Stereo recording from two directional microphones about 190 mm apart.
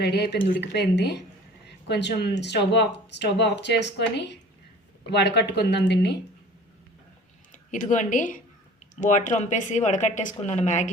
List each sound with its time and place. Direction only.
0.0 s speech: 60° left (ahead or behind)
7.5 s speech: 40° left (ahead or behind)